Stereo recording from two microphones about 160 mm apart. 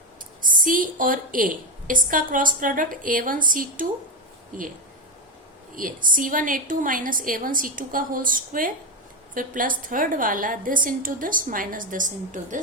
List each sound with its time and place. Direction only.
0.4 s a woman's voice: 60° right (ahead or behind)
5.7 s a woman's voice: 60° right (ahead or behind)